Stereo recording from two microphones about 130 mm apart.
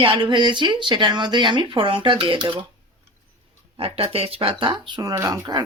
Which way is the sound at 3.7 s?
50° right (ahead or behind).